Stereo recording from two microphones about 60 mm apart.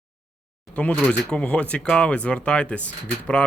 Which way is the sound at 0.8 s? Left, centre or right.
Left.